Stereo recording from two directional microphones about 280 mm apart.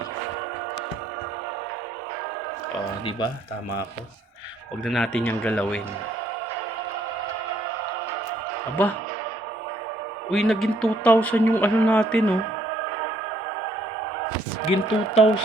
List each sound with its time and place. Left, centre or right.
4.9 s speech: centre
10.2 s speech: centre
14.7 s speech: left